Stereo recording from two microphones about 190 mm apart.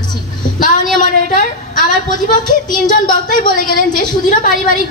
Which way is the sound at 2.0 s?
45° left (ahead or behind).